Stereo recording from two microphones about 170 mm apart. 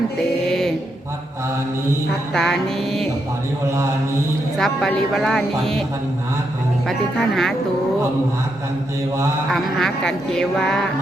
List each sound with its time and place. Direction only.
0.2 s a sound: centre (ahead or behind)
2.3 s speech: 5° left (ahead or behind)
4.5 s speech: centre (ahead or behind)
6.8 s speech: 5° left (ahead or behind)
9.5 s speech: centre (ahead or behind)